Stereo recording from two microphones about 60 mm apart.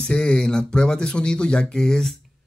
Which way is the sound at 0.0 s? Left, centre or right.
Centre.